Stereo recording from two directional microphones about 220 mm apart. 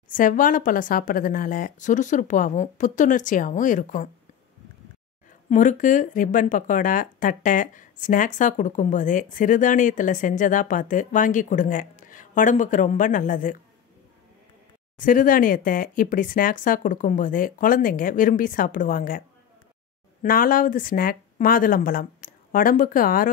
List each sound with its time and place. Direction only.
0.1 s speech: 40° left (ahead or behind)
5.5 s speech: 35° left (ahead or behind)
15.0 s speech: 40° left (ahead or behind)